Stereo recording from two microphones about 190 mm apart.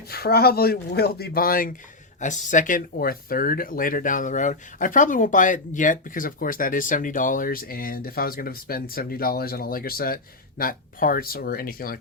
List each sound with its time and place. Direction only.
0.1 s speech: 55° left (ahead or behind)